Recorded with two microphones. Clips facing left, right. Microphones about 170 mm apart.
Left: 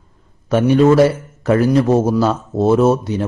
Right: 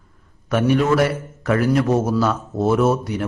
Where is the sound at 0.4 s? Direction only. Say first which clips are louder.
Left 6 dB; 30° left (ahead or behind).